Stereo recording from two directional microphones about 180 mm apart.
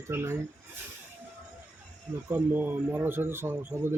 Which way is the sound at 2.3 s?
10° right (ahead or behind).